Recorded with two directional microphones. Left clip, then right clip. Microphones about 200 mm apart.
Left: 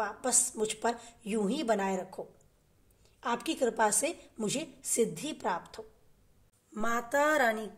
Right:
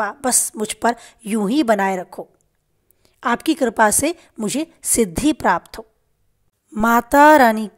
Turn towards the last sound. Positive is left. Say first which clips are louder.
# right 17 dB
turn(degrees=-45)  # may be behind; listen again after turning